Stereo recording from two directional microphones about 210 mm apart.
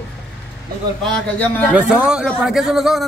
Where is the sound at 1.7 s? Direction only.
5° right (ahead or behind).